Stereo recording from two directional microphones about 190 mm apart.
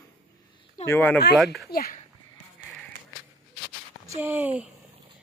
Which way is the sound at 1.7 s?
55° left (ahead or behind).